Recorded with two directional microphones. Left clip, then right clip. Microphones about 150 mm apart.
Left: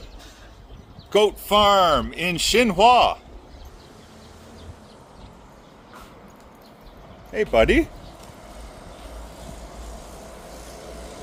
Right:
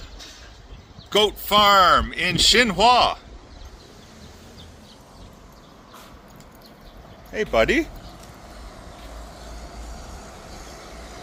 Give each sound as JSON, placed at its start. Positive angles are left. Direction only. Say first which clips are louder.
{"t": 1.1, "sound": "speech", "louder": "even", "side_deg": 20}
{"t": 7.3, "sound": "speech", "louder": "left 2 dB", "side_deg": 20}